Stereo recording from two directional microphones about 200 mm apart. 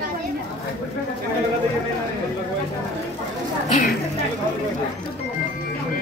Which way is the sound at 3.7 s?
35° left (ahead or behind).